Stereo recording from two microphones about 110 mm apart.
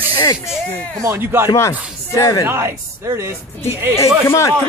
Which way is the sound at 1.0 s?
20° right (ahead or behind).